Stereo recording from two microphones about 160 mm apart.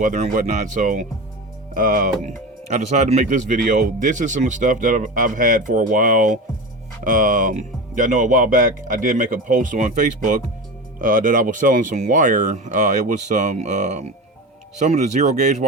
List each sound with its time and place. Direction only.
0.0 s speech: 55° right (ahead or behind)